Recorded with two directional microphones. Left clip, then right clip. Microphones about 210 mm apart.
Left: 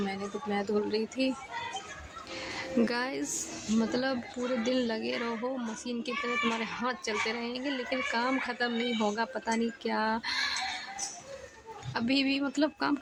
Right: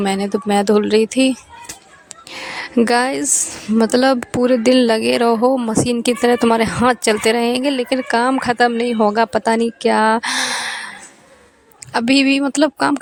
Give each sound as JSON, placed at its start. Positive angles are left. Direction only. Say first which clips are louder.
{"t": 0.0, "sound": "speech", "louder": "right 16 dB", "side_deg": -50}
{"t": 11.9, "sound": "speech", "louder": "right 15 dB", "side_deg": -50}